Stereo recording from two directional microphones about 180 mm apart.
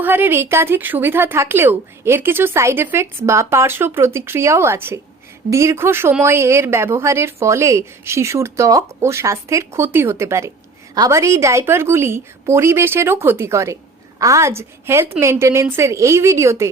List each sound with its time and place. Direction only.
0.0 s speech: 10° right (ahead or behind)